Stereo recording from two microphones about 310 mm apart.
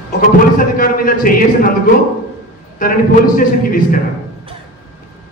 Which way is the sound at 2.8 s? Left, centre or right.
Left.